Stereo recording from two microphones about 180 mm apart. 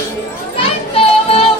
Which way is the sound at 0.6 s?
30° left (ahead or behind).